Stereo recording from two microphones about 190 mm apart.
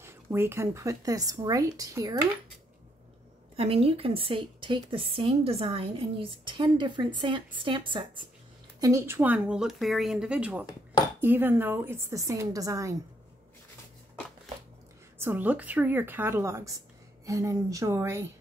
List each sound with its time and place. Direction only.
0.0 s speech: 10° right (ahead or behind)
3.5 s a woman's voice: 30° right (ahead or behind)
8.8 s speech: 15° right (ahead or behind)
15.1 s speech: 10° right (ahead or behind)